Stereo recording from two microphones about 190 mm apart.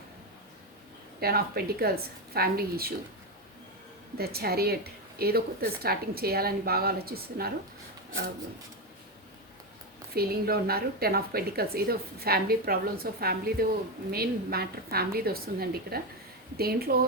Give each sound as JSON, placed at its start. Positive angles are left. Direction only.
{"t": 1.2, "sound": "a woman's voice", "side_deg": -55}
{"t": 4.2, "sound": "a woman's voice", "side_deg": -55}
{"t": 10.2, "sound": "a woman's voice", "side_deg": -55}